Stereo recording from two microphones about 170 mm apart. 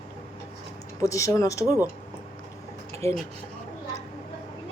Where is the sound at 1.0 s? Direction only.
20° left (ahead or behind).